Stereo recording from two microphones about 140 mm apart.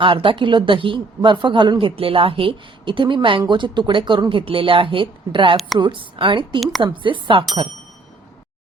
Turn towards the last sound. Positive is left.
turn(degrees=-35)  # may be behind; listen again after turning